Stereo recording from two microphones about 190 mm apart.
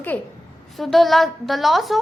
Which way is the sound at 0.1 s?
10° left (ahead or behind).